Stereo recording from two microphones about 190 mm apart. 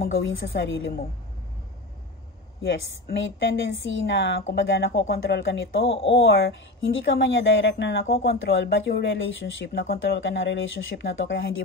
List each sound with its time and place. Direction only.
0.1 s a woman's voice: 85° left
2.6 s speech: 75° left (ahead or behind)